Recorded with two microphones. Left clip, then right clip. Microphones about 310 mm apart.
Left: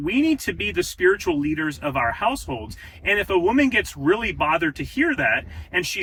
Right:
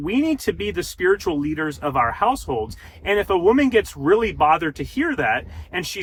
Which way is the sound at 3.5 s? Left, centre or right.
Centre.